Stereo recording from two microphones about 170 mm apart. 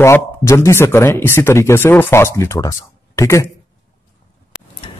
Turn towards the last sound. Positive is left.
turn(degrees=30)  # may be behind; listen again after turning